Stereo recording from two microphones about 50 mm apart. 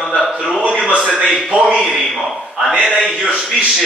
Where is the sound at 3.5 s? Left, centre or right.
Centre.